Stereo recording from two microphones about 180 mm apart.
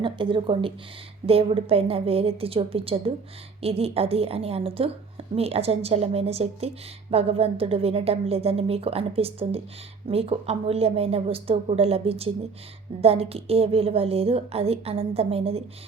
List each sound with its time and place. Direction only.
0.0 s a woman's voice: 25° right (ahead or behind)